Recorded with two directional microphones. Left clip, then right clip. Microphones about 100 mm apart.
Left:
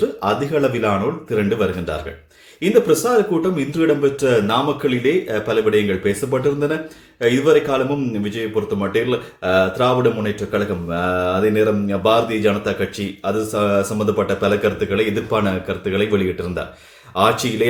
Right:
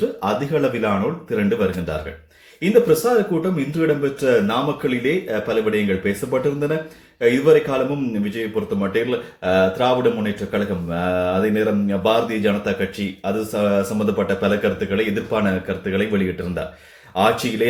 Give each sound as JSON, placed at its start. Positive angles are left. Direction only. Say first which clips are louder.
{"t": 0.3, "sound": "speech", "louder": "left 2 dB", "side_deg": 20}
{"t": 8.8, "sound": "speech", "louder": "even", "side_deg": 25}